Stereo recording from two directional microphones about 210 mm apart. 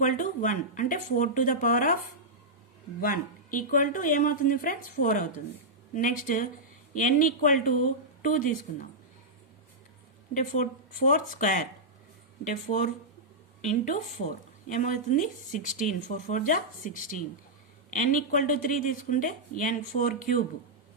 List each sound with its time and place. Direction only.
0.0 s speech: 40° left (ahead or behind)
3.0 s speech: 40° left (ahead or behind)
10.3 s speech: 35° left (ahead or behind)